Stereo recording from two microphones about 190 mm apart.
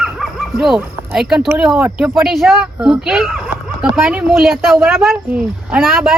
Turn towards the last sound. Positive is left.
turn(degrees=0)  # may be behind; listen again after turning